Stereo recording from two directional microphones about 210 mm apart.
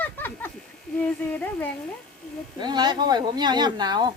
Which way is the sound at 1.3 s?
10° left (ahead or behind).